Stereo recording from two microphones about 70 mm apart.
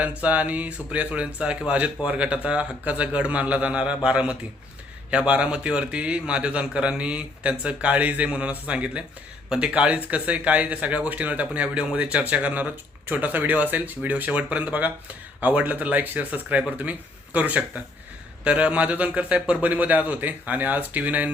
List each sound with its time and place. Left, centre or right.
0.0 s a man's voice: centre